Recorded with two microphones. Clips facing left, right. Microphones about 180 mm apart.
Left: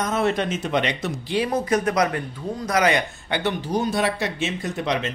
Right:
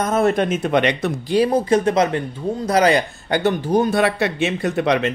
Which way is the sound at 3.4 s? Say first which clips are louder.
Right 6 dB; 50° right (ahead or behind).